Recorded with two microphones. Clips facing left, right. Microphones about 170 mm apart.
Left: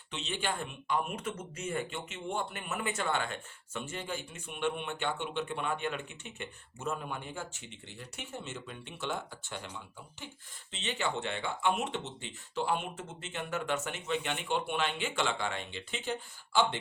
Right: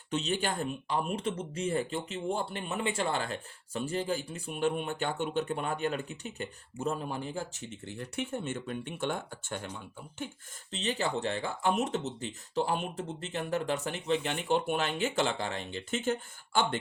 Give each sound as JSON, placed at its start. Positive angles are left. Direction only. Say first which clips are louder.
{"t": 0.1, "sound": "speech", "louder": "right 5 dB", "side_deg": -45}
{"t": 7.9, "sound": "speech", "louder": "right 8 dB", "side_deg": -55}
{"t": 10.7, "sound": "speech", "louder": "right 3 dB", "side_deg": -35}